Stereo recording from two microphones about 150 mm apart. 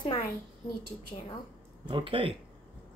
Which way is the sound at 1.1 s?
50° left (ahead or behind).